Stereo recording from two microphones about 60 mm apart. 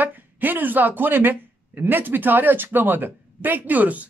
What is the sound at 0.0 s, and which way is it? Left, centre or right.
Speech, right.